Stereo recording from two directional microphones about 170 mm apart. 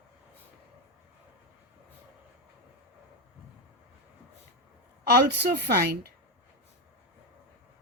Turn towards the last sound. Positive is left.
turn(degrees=-65)  # may be behind; listen again after turning